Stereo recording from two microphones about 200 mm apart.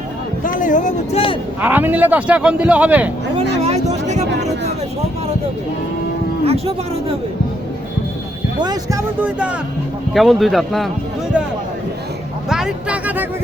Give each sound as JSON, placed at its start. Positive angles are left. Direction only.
{"t": 0.4, "sound": "a sound", "side_deg": 40}
{"t": 1.6, "sound": "speech", "side_deg": -10}
{"t": 3.5, "sound": "a sound", "side_deg": -30}
{"t": 6.4, "sound": "speech", "side_deg": -30}
{"t": 8.6, "sound": "speech", "side_deg": -20}
{"t": 9.2, "sound": "speech", "side_deg": -5}
{"t": 12.5, "sound": "speech", "side_deg": -5}